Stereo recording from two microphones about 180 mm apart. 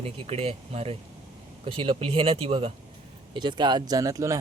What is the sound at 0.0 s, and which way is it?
Speech, 35° right (ahead or behind).